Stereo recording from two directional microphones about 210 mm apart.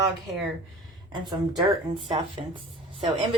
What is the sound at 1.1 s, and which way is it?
Speech, 20° right (ahead or behind).